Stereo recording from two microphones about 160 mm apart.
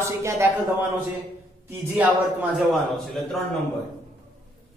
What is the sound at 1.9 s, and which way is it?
Speech, 10° right (ahead or behind).